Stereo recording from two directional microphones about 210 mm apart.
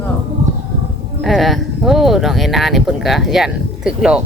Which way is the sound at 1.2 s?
Centre (ahead or behind).